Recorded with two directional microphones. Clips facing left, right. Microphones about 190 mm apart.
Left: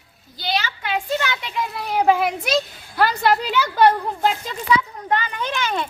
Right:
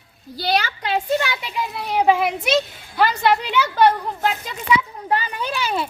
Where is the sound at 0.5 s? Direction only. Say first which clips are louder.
Right 2 dB; 40° right (ahead or behind).